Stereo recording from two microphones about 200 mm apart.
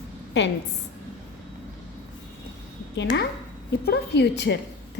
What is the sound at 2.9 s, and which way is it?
A woman's voice, 60° left (ahead or behind).